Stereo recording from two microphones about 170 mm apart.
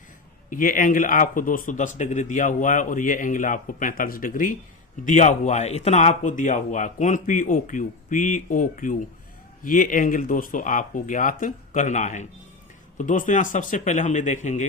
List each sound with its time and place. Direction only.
0.5 s speech: 50° left (ahead or behind)